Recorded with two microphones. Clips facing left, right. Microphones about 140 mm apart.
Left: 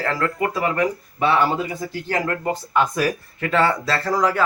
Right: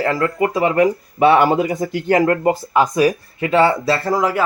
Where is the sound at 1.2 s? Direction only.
45° right (ahead or behind).